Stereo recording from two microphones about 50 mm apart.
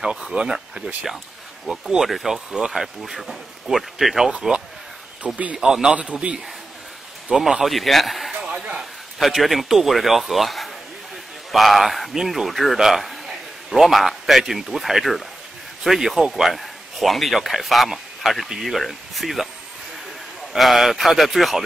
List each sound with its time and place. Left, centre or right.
0.2 s speech: centre
2.0 s speech: centre
4.3 s speech: centre
5.6 s speech: centre
7.2 s a man's voice: centre
20.5 s speech: centre